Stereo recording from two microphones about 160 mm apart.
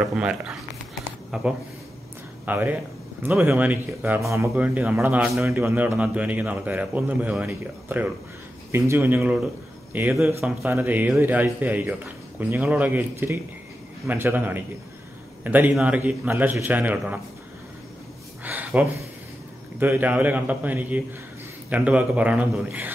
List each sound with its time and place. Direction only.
0.0 s a man's voice: 5° right (ahead or behind)
5.5 s a man's voice: 15° right (ahead or behind)
10.6 s a man's voice: 15° right (ahead or behind)
18.4 s a sound: 10° right (ahead or behind)
19.8 s a man's voice: 10° right (ahead or behind)